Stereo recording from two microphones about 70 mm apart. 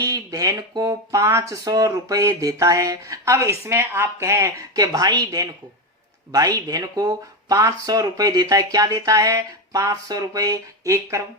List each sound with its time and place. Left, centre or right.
0.0 s speech: right
4.7 s speech: right